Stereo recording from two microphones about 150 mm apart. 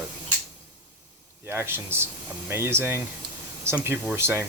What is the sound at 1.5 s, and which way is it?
Speech, 15° right (ahead or behind).